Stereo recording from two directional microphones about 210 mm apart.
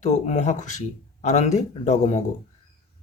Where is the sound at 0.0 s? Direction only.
35° left (ahead or behind).